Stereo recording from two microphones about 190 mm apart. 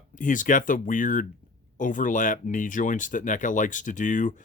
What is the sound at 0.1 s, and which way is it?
Speech, 45° left (ahead or behind).